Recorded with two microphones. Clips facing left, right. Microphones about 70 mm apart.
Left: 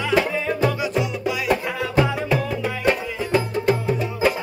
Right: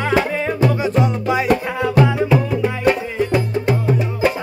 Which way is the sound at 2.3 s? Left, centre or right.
Centre.